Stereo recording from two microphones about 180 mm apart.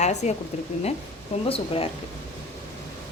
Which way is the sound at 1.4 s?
30° left (ahead or behind).